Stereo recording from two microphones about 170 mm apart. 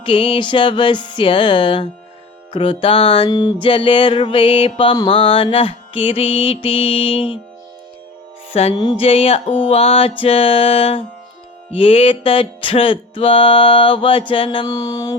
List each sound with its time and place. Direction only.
0.0 s music: 30° left (ahead or behind)
8.5 s music: 35° left (ahead or behind)